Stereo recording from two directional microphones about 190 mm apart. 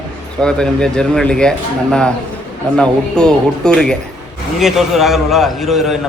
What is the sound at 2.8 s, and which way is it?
A man's voice, 5° left (ahead or behind).